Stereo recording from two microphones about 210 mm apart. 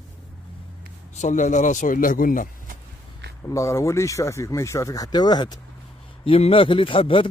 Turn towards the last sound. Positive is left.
turn(degrees=25)  # may be behind; listen again after turning